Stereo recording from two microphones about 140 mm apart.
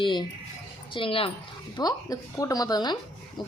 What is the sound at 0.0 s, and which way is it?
Speech, 35° left (ahead or behind).